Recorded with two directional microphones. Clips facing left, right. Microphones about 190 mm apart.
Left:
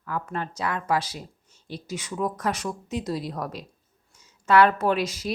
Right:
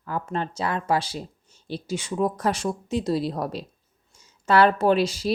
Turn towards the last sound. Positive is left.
turn(degrees=-30)  # may be behind; listen again after turning